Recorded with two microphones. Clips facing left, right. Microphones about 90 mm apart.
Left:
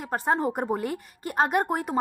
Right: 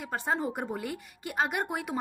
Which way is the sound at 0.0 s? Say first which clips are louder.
Left 5 dB; 45° left (ahead or behind).